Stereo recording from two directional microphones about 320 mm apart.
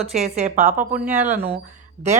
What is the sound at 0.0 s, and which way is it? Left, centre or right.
Speech, centre.